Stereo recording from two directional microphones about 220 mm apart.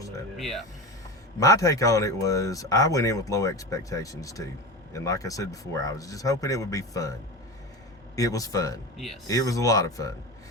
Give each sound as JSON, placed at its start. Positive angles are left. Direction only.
{"t": 0.3, "sound": "speech", "side_deg": 0}
{"t": 1.4, "sound": "speech", "side_deg": 15}